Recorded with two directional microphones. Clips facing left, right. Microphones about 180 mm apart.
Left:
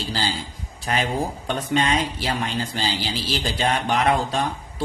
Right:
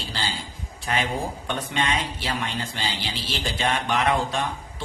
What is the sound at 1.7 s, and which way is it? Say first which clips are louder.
Speech: left 6 dB; 35° left (ahead or behind).